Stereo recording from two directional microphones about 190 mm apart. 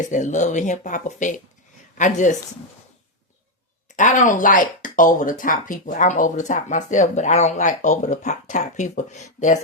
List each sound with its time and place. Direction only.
0.1 s speech: 40° left (ahead or behind)
3.9 s speech: 40° left (ahead or behind)